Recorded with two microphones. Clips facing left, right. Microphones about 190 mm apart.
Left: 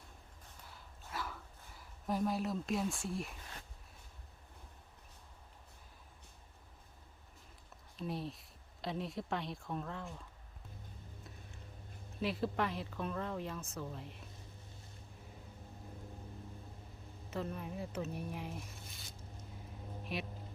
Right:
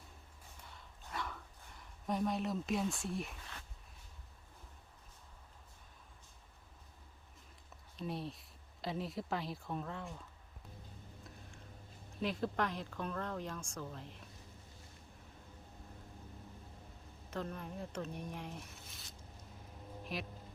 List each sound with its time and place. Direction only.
0.6 s a sound: centre (ahead or behind)
7.9 s speech: centre (ahead or behind)
12.2 s speech: centre (ahead or behind)
17.3 s speech: 5° left (ahead or behind)